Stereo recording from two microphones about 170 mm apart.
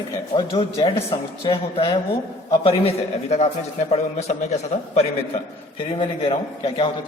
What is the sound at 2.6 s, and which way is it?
Speech, 40° left (ahead or behind).